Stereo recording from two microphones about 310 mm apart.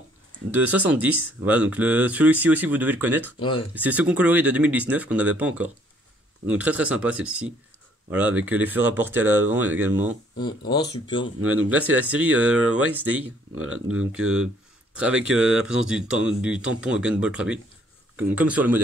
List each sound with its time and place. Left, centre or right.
0.5 s speech: centre
3.3 s speech: centre
3.7 s speech: centre
10.4 s speech: centre
11.7 s speech: centre
13.6 s speech: right
13.9 s speech: centre